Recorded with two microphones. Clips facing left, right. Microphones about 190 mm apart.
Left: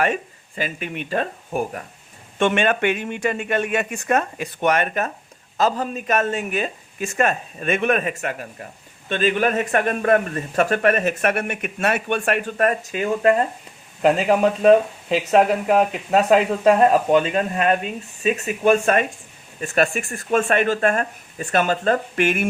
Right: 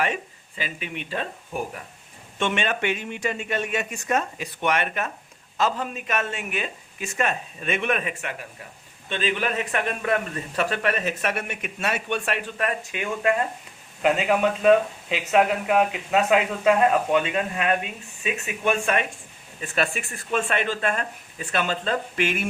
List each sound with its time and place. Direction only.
0.0 s speech: 45° left (ahead or behind)